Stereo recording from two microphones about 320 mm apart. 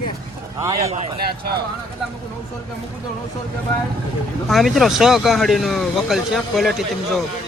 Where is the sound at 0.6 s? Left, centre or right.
Centre.